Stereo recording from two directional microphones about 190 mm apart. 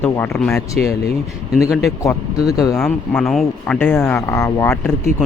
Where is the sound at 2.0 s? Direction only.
15° left (ahead or behind).